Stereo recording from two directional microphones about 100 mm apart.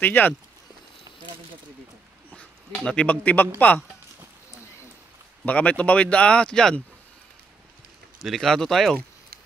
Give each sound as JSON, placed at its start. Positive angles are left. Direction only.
{"t": 0.0, "sound": "speech", "side_deg": 20}
{"t": 2.8, "sound": "speech", "side_deg": 10}
{"t": 5.4, "sound": "speech", "side_deg": 15}
{"t": 8.2, "sound": "speech", "side_deg": 0}